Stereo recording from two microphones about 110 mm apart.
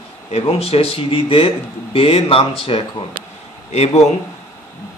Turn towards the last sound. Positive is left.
turn(degrees=80)